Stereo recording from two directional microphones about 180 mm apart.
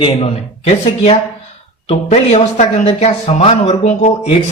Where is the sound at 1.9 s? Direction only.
35° left (ahead or behind).